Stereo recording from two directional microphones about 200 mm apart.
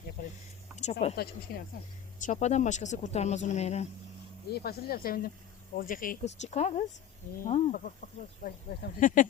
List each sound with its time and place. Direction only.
0.2 s a sound: 50° left (ahead or behind)
0.8 s speech: 35° left (ahead or behind)
1.5 s speech: 50° left (ahead or behind)
2.2 s speech: 35° left (ahead or behind)
4.5 s speech: 50° left (ahead or behind)